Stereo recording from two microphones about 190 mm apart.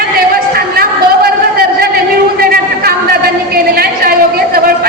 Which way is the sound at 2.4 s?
50° right (ahead or behind).